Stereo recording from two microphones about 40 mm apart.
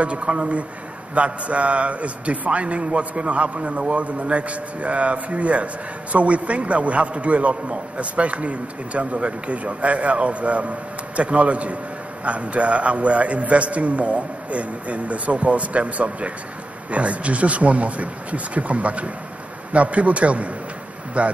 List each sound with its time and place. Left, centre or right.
0.0 s a man's voice: right